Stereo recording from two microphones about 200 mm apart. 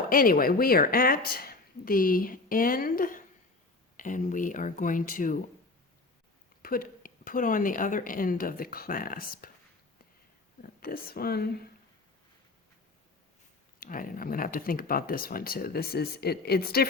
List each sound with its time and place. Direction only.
0.1 s speech: 45° left (ahead or behind)
6.6 s speech: 45° left (ahead or behind)
10.6 s speech: 45° left (ahead or behind)
13.7 s speech: 45° left (ahead or behind)